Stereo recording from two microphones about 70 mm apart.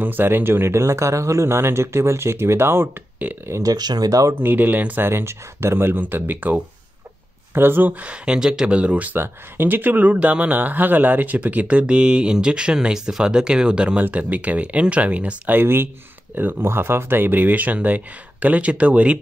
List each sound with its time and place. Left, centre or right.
0.0 s speech: right
3.6 s speech: right
4.4 s speech: right